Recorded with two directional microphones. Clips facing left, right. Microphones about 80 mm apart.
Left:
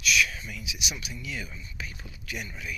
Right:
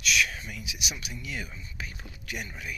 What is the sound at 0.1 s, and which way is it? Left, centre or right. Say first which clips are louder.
Speech: left 1 dB; right.